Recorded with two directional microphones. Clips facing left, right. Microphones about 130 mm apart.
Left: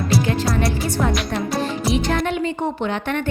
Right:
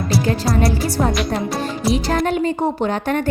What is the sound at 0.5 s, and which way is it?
A woman's voice, 35° right (ahead or behind).